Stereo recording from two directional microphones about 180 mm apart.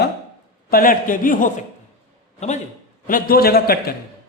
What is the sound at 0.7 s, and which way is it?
Speech, 50° left (ahead or behind).